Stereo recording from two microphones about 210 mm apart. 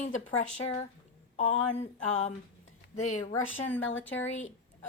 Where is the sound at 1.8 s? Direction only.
35° left (ahead or behind).